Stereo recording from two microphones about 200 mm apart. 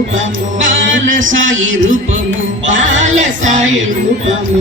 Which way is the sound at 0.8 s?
70° right (ahead or behind).